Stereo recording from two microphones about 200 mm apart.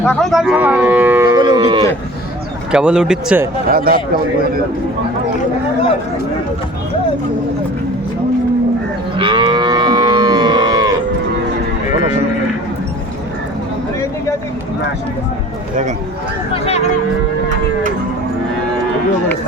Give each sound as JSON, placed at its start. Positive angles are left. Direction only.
{"t": 0.0, "sound": "speech", "side_deg": 5}
{"t": 2.7, "sound": "speech", "side_deg": -5}
{"t": 3.7, "sound": "speech", "side_deg": -50}
{"t": 9.1, "sound": "moo", "side_deg": -25}
{"t": 16.5, "sound": "a sound", "side_deg": 30}